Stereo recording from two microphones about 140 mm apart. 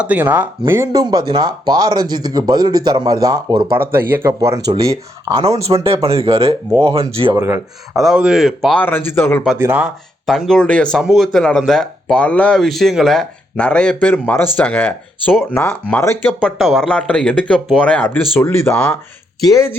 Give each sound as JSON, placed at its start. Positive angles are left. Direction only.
{"t": 0.0, "sound": "speech", "side_deg": -10}
{"t": 1.0, "sound": "speech", "side_deg": -30}
{"t": 5.3, "sound": "speech", "side_deg": -45}
{"t": 7.3, "sound": "speech", "side_deg": -15}
{"t": 7.9, "sound": "speech", "side_deg": -5}
{"t": 8.7, "sound": "speech", "side_deg": 15}
{"t": 9.6, "sound": "speech", "side_deg": -15}
{"t": 10.2, "sound": "speech", "side_deg": 0}
{"t": 16.4, "sound": "speech", "side_deg": 0}